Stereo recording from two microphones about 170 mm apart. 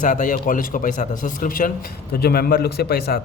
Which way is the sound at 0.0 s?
50° left (ahead or behind).